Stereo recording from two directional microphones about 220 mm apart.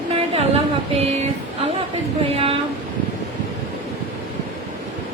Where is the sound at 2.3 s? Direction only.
25° right (ahead or behind).